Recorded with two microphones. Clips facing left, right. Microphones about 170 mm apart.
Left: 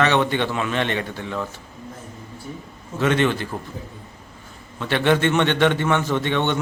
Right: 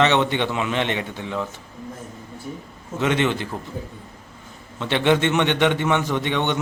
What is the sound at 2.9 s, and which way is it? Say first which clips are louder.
Speech: left 1 dB; 20° right (ahead or behind).